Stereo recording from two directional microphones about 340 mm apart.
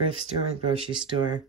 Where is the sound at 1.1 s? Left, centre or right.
Centre.